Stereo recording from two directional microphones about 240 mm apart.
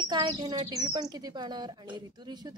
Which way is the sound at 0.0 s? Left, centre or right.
Centre.